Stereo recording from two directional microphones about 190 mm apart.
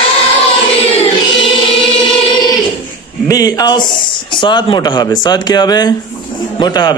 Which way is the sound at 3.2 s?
20° left (ahead or behind).